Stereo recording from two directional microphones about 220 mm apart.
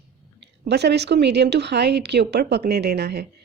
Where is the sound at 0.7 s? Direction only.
50° right (ahead or behind).